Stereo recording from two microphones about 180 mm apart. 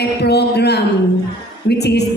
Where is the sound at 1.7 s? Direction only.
65° left (ahead or behind).